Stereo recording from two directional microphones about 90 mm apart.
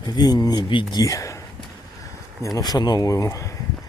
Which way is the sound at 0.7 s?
65° left (ahead or behind).